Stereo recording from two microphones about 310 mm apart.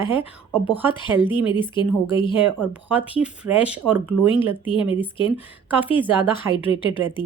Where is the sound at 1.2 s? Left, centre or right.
Centre.